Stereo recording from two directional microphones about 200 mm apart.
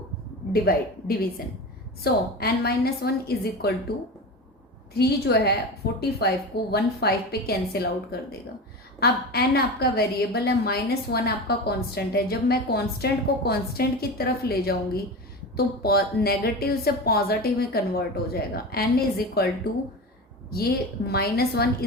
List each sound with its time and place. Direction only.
0.5 s a woman's voice: 50° left (ahead or behind)
4.9 s a woman's voice: 55° left (ahead or behind)
21.1 s a woman's voice: 50° left (ahead or behind)